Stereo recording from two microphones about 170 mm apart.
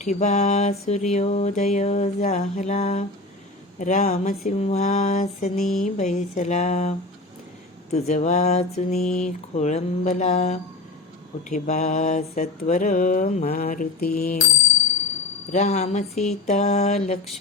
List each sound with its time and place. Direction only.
0.0 s mantra: 45° left (ahead or behind)
5.5 s a sound: centre (ahead or behind)
5.8 s mantra: 50° left (ahead or behind)
7.9 s mantra: 45° left (ahead or behind)
13.5 s mantra: 60° left (ahead or behind)
15.5 s mantra: 40° left (ahead or behind)